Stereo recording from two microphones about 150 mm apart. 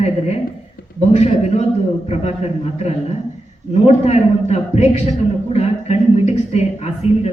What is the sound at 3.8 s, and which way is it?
A man's voice, 45° left (ahead or behind).